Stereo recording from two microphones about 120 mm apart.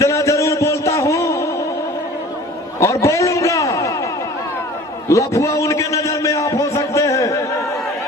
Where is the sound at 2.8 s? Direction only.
25° left (ahead or behind).